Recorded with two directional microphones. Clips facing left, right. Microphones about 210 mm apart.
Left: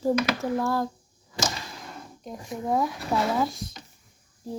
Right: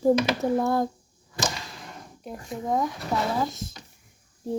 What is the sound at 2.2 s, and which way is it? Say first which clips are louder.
Speech: even; centre (ahead or behind).